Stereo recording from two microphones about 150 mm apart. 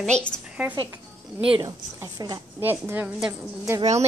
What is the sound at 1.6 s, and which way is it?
Speech, 20° right (ahead or behind).